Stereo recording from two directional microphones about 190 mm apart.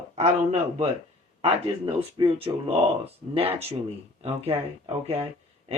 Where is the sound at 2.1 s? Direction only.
30° right (ahead or behind).